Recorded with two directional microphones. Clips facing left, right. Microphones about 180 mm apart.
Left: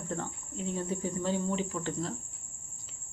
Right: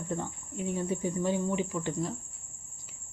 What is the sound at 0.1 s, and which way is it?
Speech, 15° right (ahead or behind).